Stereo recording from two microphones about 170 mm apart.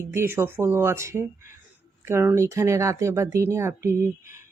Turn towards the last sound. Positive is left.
turn(degrees=-15)  # may be behind; listen again after turning